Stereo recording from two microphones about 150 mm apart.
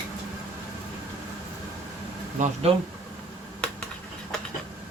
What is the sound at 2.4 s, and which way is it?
Speech, 55° right (ahead or behind).